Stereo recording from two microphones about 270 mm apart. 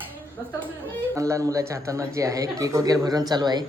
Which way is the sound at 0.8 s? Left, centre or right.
Centre.